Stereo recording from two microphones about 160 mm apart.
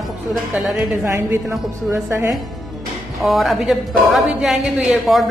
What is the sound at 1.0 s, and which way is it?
Speech, 20° right (ahead or behind).